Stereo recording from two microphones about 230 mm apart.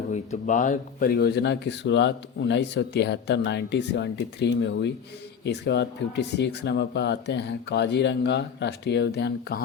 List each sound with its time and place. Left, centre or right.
0.1 s speech: left